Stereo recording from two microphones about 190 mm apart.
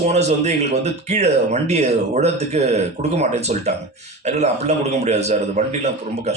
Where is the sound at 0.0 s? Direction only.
35° right (ahead or behind).